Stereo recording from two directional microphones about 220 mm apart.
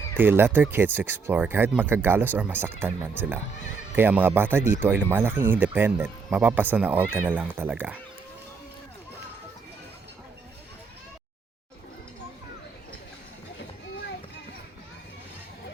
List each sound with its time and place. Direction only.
0.2 s speech: 10° right (ahead or behind)